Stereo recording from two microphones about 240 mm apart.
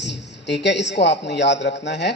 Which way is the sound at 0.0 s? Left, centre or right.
Left.